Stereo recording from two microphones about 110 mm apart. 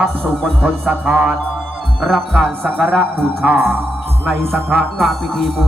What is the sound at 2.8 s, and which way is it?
Music, 10° right (ahead or behind).